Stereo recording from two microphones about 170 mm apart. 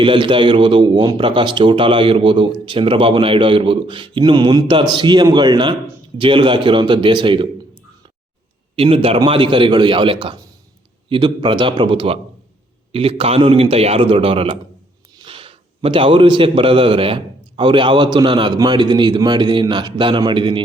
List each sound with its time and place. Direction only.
0.0 s a man's voice: 30° right (ahead or behind)
8.7 s a man's voice: 35° right (ahead or behind)